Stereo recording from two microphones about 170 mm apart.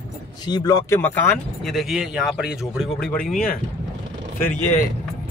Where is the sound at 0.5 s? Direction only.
25° left (ahead or behind).